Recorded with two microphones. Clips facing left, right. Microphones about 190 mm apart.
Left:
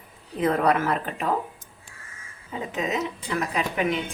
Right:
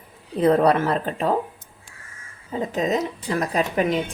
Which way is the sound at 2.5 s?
35° right (ahead or behind).